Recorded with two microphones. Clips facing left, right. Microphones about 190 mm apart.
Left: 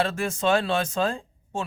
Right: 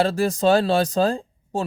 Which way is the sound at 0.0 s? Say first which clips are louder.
Right 6 dB; 35° right (ahead or behind).